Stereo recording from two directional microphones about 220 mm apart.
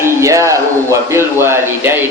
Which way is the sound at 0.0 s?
15° right (ahead or behind).